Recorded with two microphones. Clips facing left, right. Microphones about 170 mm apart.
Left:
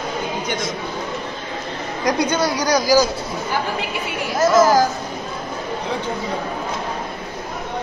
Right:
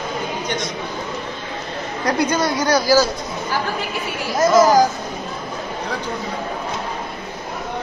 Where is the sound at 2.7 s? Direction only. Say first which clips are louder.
Even; 15° left (ahead or behind).